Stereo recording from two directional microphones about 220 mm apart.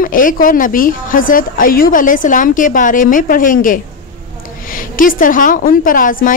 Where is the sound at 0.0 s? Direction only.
40° left (ahead or behind).